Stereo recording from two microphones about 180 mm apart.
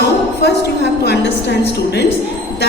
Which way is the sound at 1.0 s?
65° left (ahead or behind).